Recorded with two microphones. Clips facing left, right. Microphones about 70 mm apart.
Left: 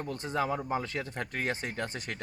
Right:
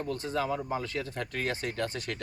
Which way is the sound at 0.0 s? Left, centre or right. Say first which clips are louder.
Right 1 dB; left.